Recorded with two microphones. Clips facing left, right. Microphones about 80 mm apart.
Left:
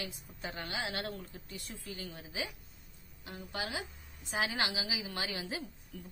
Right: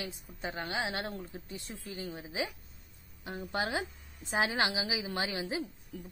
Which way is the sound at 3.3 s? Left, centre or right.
Right.